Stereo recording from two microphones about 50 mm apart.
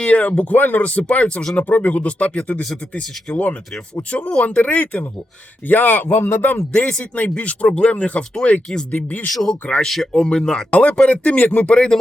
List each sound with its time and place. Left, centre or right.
0.0 s speech: left
6.7 s speech: left
9.3 s speech: centre
10.1 s speech: centre
10.7 s speech: left